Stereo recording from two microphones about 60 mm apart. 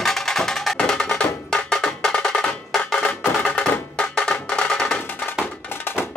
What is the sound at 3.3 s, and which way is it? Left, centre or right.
Music, left.